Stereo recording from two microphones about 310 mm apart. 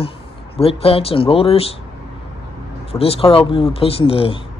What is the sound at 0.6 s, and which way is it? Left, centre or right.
Speech, centre.